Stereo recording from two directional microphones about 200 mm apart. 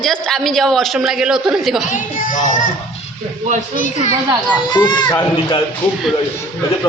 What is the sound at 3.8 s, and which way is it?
Speech, 35° left (ahead or behind).